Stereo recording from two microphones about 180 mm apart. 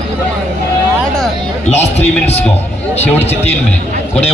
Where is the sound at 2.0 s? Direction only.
35° left (ahead or behind).